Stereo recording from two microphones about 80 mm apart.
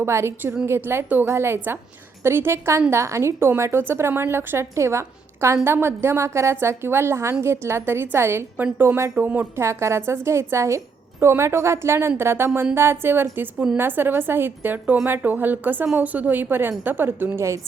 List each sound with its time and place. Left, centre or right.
0.0 s a woman's voice: right
9.1 s a woman's voice: right
9.6 s a woman's voice: right